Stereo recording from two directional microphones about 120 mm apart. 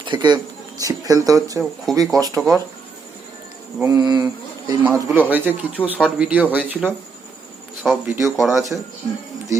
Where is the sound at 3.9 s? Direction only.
35° right (ahead or behind).